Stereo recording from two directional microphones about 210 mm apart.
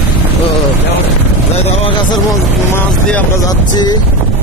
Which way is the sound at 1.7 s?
20° left (ahead or behind).